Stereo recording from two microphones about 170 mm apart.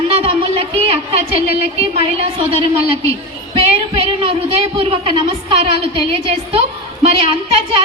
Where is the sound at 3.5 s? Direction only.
35° right (ahead or behind).